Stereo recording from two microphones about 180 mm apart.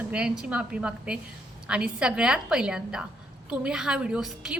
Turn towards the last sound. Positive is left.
turn(degrees=-5)  # may be behind; listen again after turning